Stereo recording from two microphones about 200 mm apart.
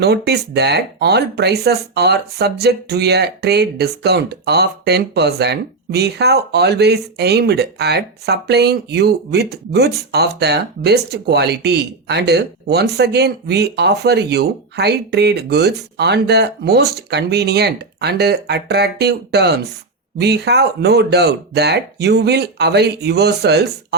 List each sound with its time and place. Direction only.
0.0 s speech: 55° right (ahead or behind)